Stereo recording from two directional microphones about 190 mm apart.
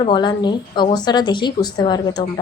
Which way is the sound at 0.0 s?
25° left (ahead or behind).